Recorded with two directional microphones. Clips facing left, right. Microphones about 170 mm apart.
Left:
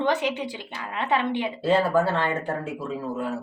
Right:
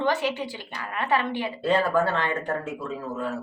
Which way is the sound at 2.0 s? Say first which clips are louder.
Left 2 dB; 30° left (ahead or behind).